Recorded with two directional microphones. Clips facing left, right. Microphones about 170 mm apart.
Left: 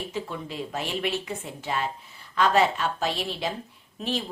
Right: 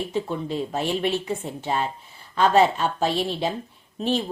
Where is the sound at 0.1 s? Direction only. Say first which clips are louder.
Right 7 dB; 30° right (ahead or behind).